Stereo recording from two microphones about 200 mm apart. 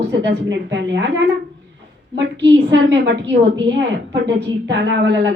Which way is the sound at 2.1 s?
65° right (ahead or behind).